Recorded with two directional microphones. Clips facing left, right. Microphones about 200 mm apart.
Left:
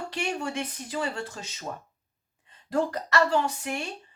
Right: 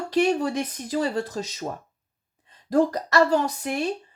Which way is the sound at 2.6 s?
40° right (ahead or behind).